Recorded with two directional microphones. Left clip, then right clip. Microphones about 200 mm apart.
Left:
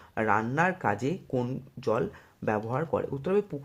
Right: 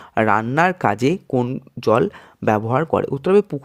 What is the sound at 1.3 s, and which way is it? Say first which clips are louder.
Speech: right 10 dB; 30° right (ahead or behind).